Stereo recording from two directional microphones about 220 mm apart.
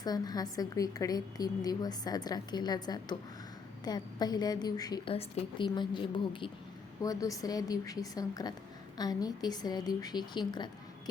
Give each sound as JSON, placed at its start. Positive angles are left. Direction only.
{"t": 0.0, "sound": "a woman's voice", "side_deg": 20}